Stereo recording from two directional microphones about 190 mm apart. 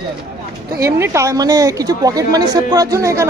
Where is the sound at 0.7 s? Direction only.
15° right (ahead or behind).